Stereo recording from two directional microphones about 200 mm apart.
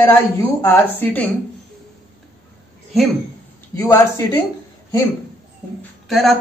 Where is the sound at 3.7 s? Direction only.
15° left (ahead or behind).